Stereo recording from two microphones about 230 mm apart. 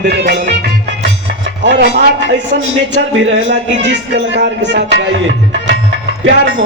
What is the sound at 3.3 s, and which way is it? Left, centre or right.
A man's voice, right.